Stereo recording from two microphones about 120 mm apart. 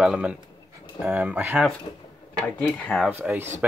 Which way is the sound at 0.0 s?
5° right (ahead or behind).